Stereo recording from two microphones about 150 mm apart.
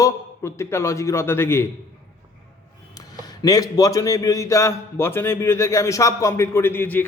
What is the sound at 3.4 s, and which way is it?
A man's voice, 25° left (ahead or behind).